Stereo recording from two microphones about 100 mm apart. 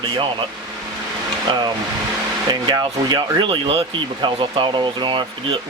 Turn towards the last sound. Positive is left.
turn(degrees=-55)  # may be behind; listen again after turning